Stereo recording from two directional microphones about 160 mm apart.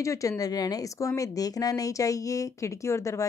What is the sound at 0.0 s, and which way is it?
Speech, 20° left (ahead or behind).